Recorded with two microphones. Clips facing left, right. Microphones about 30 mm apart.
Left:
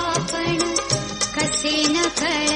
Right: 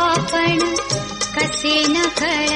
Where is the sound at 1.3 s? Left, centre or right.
Centre.